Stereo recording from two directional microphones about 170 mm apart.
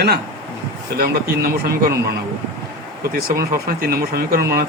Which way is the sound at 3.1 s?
60° right (ahead or behind).